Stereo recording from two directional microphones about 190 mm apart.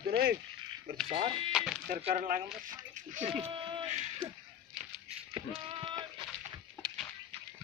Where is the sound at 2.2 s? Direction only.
45° right (ahead or behind); by 4.3 s 25° right (ahead or behind).